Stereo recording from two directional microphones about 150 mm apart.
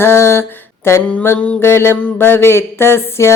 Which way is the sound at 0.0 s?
15° left (ahead or behind).